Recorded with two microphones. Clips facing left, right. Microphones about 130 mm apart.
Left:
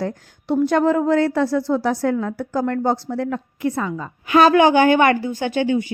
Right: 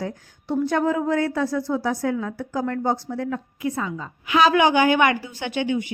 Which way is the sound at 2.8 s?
85° left.